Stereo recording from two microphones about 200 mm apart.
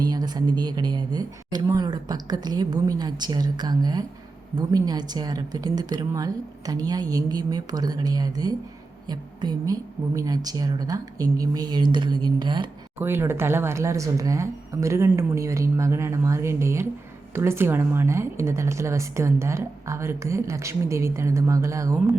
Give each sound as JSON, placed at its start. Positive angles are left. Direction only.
{"t": 0.0, "sound": "a woman's voice", "side_deg": -20}